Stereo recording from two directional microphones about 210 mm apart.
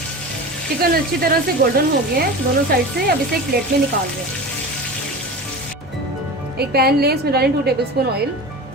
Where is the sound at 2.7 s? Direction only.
45° right (ahead or behind).